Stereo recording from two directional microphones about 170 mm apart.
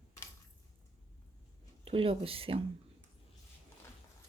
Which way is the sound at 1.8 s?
35° right (ahead or behind).